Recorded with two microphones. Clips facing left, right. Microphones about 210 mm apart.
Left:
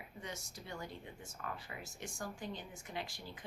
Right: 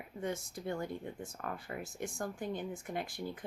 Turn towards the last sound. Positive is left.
turn(degrees=-50)  # may be behind; listen again after turning